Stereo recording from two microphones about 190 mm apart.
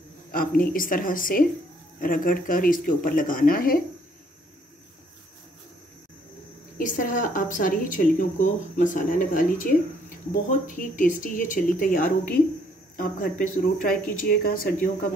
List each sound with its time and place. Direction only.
0.3 s a woman's voice: 50° left (ahead or behind)
6.8 s a woman's voice: 45° left (ahead or behind)